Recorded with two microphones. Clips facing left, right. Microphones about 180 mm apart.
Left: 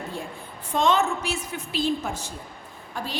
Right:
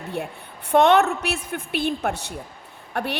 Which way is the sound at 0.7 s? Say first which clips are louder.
Right 6 dB; 65° right (ahead or behind).